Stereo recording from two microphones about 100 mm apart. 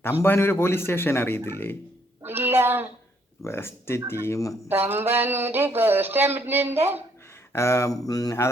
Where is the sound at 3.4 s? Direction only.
25° left (ahead or behind).